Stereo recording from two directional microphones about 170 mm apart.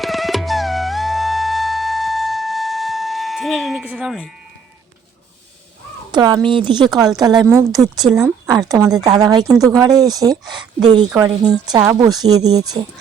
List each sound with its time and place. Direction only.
0.0 s music: centre (ahead or behind)
6.1 s speech: 25° right (ahead or behind)